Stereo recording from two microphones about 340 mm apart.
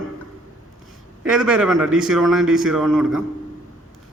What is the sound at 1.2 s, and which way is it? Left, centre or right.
A man's voice, centre.